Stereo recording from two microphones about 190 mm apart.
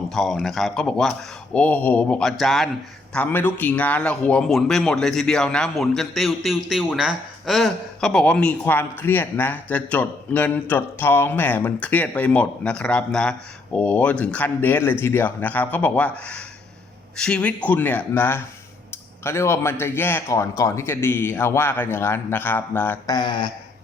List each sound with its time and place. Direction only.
0.1 s a man's voice: centre (ahead or behind)
23.1 s speech: 25° left (ahead or behind)